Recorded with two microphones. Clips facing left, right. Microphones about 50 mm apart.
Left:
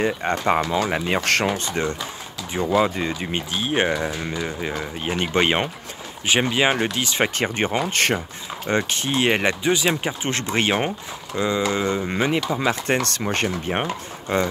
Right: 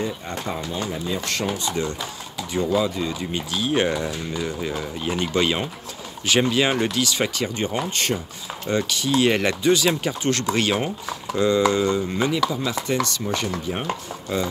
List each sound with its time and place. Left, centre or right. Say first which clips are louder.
0.0 s speech: left 6 dB; left
2.5 s speech: left 1 dB; left
2.8 s speech: left 2 dB; left
3.5 s speech: even; left
6.2 s speech: even; left
8.6 s speech: even; left
12.6 s speech: left 2 dB; left